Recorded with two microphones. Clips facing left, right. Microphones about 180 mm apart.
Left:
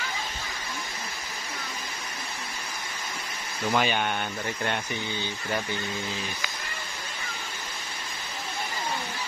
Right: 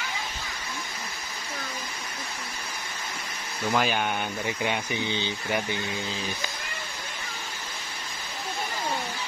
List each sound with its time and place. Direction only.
3.6 s speech: centre (ahead or behind)
5.0 s speech: 20° right (ahead or behind)